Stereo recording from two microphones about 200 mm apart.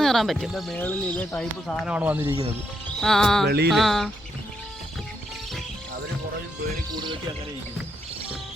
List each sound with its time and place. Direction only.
0.0 s speech: centre (ahead or behind)
3.0 s speech: centre (ahead or behind)